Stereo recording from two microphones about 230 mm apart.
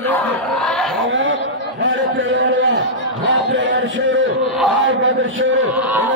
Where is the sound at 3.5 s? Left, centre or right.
Right.